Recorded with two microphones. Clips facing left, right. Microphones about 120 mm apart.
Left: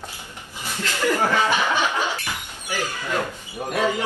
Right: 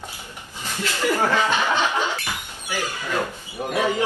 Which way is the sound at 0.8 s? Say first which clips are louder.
Even; 15° right (ahead or behind).